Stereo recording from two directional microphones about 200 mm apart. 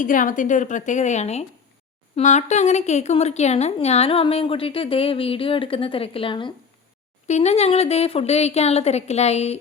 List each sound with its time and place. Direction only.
0.0 s a woman's voice: 40° left (ahead or behind)